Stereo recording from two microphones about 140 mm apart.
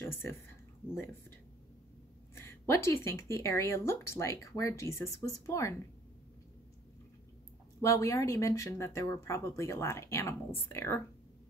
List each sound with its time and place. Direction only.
0.0 s speech: 15° left (ahead or behind)
2.3 s speech: 20° left (ahead or behind)
7.8 s speech: 20° left (ahead or behind)